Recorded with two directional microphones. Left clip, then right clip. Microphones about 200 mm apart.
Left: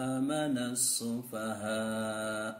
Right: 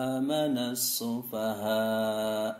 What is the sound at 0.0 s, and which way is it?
Mantra, 15° left (ahead or behind).